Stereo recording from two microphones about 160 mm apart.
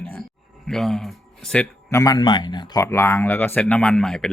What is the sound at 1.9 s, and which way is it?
Speech, 20° left (ahead or behind).